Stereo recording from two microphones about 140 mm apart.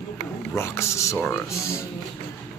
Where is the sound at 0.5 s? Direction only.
20° left (ahead or behind).